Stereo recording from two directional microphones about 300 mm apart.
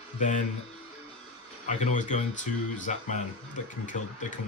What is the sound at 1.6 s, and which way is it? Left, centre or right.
Speech, left.